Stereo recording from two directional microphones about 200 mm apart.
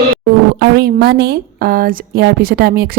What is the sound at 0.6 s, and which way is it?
Speech, 55° right (ahead or behind).